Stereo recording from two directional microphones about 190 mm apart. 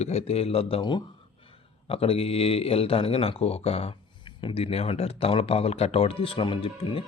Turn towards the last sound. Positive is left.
turn(degrees=30)  # may be behind; listen again after turning